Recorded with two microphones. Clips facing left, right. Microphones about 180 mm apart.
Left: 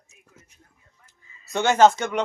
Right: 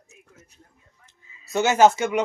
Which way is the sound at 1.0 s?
5° right (ahead or behind).